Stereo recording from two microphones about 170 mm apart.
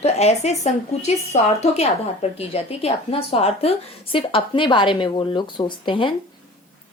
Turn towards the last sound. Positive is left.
turn(degrees=30)  # may be behind; listen again after turning